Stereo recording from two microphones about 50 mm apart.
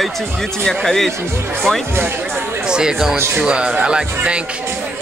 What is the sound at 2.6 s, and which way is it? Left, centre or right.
Speech, centre.